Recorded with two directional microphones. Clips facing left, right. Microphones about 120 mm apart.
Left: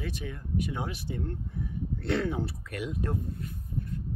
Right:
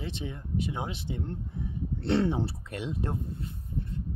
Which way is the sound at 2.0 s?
30° right (ahead or behind).